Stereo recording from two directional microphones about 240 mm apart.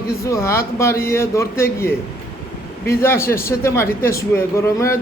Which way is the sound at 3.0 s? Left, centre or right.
Centre.